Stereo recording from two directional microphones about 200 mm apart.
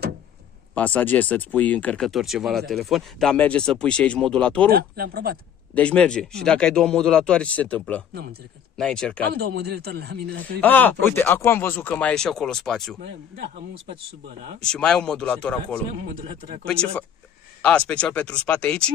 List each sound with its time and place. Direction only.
0.7 s speech: 10° left (ahead or behind)
4.6 s speech: 50° right (ahead or behind)
5.8 s speech: 5° left (ahead or behind)
8.1 s speech: 50° right (ahead or behind)
8.7 s speech: 5° left (ahead or behind)
9.3 s speech: 50° right (ahead or behind)
10.6 s speech: 10° left (ahead or behind)
14.6 s speech: 5° left (ahead or behind)
17.6 s speech: 5° left (ahead or behind)